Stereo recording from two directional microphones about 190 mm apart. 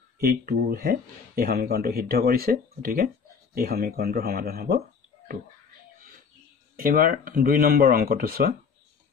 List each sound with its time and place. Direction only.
0.2 s speech: 55° right (ahead or behind)
6.8 s speech: 50° right (ahead or behind)